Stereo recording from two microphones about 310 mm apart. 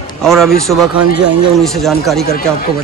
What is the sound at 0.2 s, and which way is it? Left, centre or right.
Speech, centre.